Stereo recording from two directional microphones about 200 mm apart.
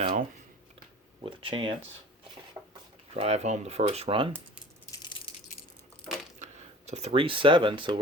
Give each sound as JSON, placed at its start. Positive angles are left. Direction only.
{"t": 0.0, "sound": "speech", "side_deg": -35}
{"t": 3.2, "sound": "speech", "side_deg": -30}
{"t": 6.4, "sound": "speech", "side_deg": -35}